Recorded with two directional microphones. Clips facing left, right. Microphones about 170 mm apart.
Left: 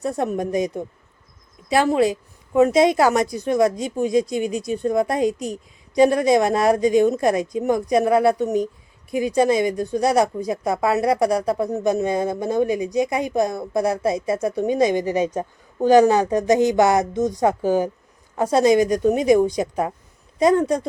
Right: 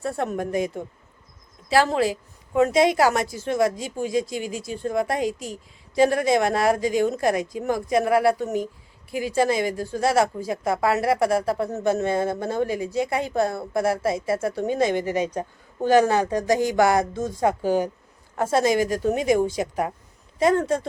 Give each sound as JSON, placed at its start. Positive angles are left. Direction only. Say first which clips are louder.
{"t": 0.0, "sound": "speech", "louder": "left 3 dB", "side_deg": 20}